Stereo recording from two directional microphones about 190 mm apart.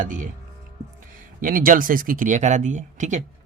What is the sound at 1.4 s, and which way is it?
Speech, 45° right (ahead or behind).